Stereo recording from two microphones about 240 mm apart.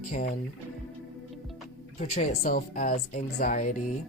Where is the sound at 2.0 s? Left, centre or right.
Left.